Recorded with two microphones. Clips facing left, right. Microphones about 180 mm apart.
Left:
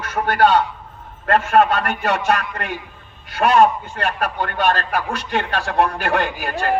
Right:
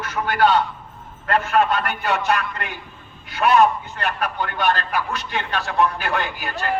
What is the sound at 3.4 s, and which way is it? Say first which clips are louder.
A man's voice: left 2 dB; 50° left (ahead or behind).